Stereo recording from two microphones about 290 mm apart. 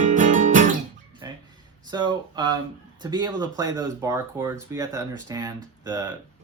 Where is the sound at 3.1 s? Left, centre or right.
Centre.